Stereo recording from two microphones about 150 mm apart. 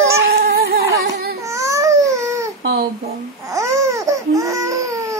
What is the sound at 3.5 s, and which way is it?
Baby cry, 20° right (ahead or behind).